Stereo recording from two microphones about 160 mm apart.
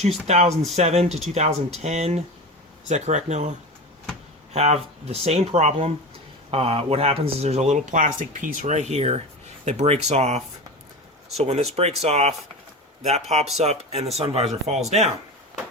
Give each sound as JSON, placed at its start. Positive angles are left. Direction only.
{"t": 0.0, "sound": "speech", "side_deg": -45}
{"t": 4.5, "sound": "speech", "side_deg": -40}